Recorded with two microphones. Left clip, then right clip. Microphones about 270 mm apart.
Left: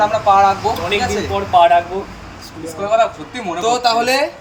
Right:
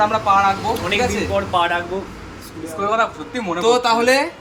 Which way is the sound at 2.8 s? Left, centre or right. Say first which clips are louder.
Left 4 dB; centre.